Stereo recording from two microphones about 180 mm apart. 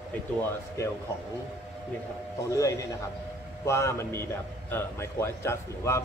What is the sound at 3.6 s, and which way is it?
A man's voice, 15° left (ahead or behind).